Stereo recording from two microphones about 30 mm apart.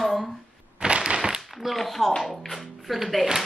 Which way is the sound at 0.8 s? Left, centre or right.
Right.